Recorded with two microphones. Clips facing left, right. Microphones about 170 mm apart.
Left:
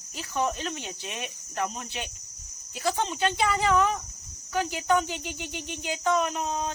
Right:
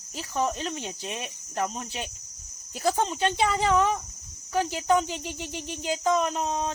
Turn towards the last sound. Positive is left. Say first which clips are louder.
# right 2 dB
turn(degrees=-30)  # may be behind; listen again after turning